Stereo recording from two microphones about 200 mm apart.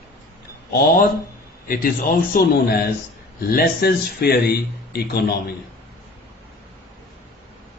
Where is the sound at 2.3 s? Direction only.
50° left (ahead or behind).